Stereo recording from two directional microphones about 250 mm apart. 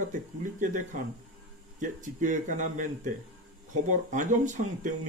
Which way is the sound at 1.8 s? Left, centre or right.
Right.